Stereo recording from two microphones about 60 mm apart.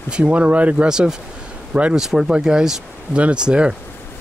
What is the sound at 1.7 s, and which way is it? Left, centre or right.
Speech, right.